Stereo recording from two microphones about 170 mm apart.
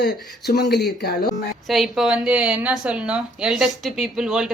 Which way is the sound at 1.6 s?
Centre (ahead or behind).